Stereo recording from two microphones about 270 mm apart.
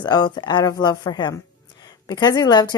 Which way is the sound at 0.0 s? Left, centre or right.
Centre.